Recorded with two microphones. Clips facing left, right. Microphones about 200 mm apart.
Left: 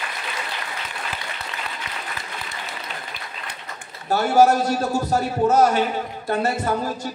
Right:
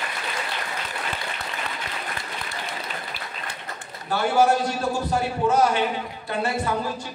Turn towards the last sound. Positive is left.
turn(degrees=40)  # may be behind; listen again after turning